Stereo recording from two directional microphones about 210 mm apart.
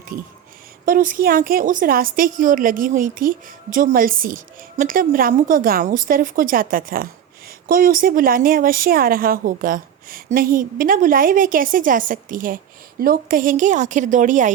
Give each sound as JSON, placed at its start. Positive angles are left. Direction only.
{"t": 0.1, "sound": "a woman's voice", "side_deg": -40}